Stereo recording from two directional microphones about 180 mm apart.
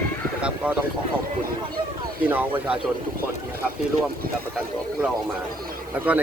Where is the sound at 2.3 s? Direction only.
10° right (ahead or behind).